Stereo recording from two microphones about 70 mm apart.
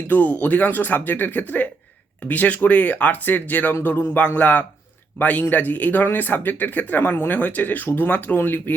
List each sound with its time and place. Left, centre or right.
0.1 s speech: left